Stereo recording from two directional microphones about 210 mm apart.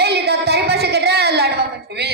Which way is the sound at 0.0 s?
50° right (ahead or behind).